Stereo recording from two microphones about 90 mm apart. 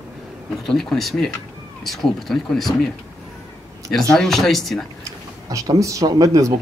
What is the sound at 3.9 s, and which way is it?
Speech, 5° left (ahead or behind).